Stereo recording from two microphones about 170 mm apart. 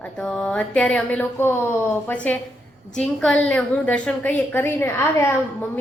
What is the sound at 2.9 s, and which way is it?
A woman's voice, 5° left (ahead or behind).